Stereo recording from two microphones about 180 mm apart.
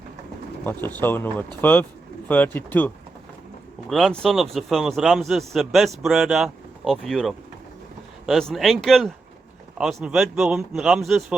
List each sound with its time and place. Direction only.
0.6 s speech: 10° left (ahead or behind)